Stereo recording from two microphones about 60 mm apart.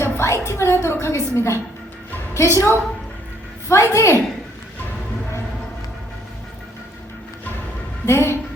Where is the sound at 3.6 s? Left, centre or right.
Left.